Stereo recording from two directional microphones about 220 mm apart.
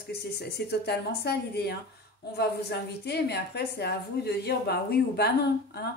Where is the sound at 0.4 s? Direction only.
50° left (ahead or behind).